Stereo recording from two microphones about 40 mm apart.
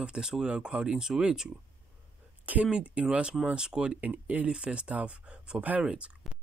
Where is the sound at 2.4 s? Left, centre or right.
Right.